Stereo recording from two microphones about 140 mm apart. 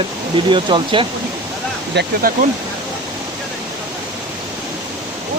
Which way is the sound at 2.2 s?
90° right.